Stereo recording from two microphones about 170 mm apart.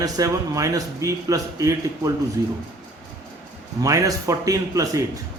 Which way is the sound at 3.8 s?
20° right (ahead or behind).